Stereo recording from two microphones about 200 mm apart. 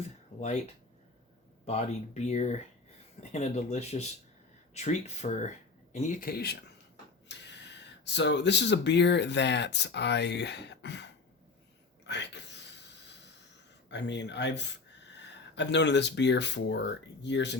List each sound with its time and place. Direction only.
1.6 s speech: 30° left (ahead or behind); by 11.1 s 60° left (ahead or behind)
12.0 s a sound: 60° left (ahead or behind)
13.9 s speech: 60° left (ahead or behind)